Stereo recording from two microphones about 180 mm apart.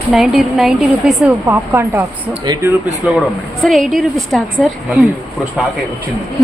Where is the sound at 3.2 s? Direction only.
Centre (ahead or behind).